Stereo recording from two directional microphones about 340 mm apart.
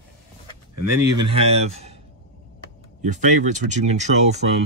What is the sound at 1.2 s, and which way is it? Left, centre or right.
Speech, centre.